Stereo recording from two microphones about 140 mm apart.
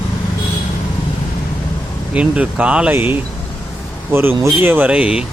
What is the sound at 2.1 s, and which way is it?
Speech, 10° right (ahead or behind).